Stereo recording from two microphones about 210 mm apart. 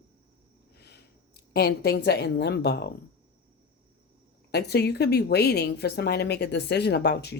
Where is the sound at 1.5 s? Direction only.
50° left (ahead or behind).